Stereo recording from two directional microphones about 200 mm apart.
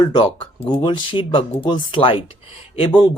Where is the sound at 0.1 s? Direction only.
25° left (ahead or behind).